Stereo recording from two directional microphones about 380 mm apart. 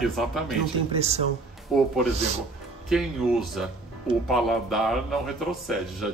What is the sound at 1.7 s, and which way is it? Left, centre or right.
Speech, centre.